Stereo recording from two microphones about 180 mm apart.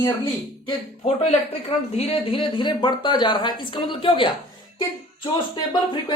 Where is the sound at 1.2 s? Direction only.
35° left (ahead or behind).